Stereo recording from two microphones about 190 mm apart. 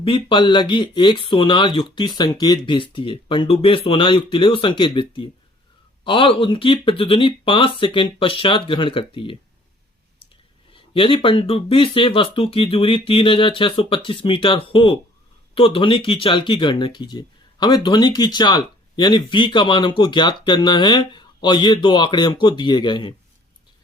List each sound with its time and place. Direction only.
0.0 s speech: 25° left (ahead or behind)
10.2 s clicking: 30° left (ahead or behind)
10.7 s speech: 30° left (ahead or behind)